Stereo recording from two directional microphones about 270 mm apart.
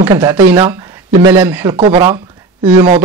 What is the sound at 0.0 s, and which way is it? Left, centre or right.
Speech, centre.